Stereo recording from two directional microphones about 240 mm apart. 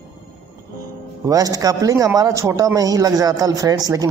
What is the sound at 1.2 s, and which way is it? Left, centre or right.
Speech, centre.